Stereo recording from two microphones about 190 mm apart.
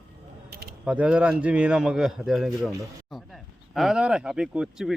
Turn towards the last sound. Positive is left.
turn(degrees=-5)  # may be behind; listen again after turning